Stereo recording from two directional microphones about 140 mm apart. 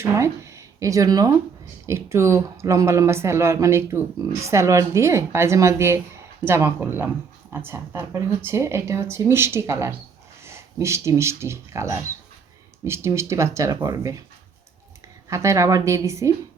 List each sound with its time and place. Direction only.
0.0 s speech: 20° right (ahead or behind)
15.3 s speech: 20° right (ahead or behind)